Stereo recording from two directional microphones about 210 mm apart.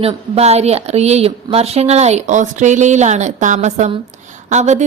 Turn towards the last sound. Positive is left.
turn(degrees=-35)  # may be behind; listen again after turning